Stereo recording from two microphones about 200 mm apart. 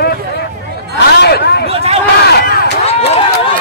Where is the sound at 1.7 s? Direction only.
30° right (ahead or behind).